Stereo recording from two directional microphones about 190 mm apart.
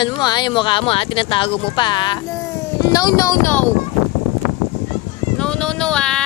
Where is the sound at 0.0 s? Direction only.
25° left (ahead or behind).